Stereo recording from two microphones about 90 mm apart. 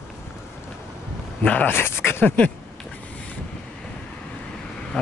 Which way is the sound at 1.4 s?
15° left (ahead or behind).